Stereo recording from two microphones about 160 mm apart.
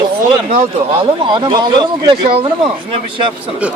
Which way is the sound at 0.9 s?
30° right (ahead or behind).